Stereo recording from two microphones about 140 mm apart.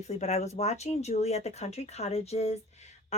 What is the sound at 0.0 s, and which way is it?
A woman's voice, 50° left (ahead or behind).